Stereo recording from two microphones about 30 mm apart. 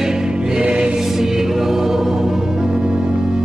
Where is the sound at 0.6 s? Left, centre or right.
Right.